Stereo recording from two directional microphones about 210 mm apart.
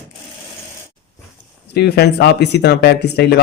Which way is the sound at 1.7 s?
50° left (ahead or behind).